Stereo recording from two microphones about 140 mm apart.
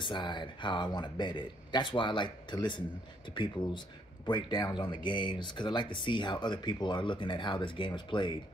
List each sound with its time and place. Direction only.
0.0 s speech: 35° left (ahead or behind)